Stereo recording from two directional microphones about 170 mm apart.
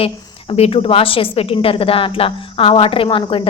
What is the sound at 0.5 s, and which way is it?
A woman's voice, 35° left (ahead or behind).